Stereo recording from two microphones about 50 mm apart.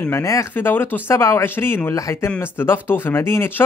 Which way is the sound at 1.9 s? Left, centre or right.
Left.